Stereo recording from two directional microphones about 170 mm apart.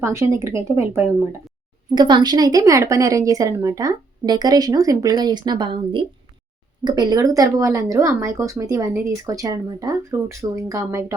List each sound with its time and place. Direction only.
0.0 s speech: 15° right (ahead or behind)
2.0 s speech: 25° right (ahead or behind)